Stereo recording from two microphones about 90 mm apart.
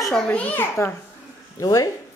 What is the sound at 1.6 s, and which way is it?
Speech, 40° left (ahead or behind).